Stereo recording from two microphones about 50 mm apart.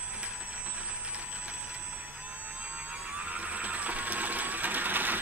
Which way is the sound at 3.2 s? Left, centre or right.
Right.